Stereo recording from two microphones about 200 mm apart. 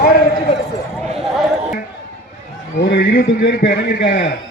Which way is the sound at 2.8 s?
55° left (ahead or behind).